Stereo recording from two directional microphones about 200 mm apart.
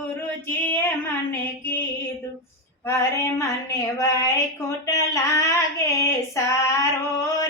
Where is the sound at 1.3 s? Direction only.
10° left (ahead or behind).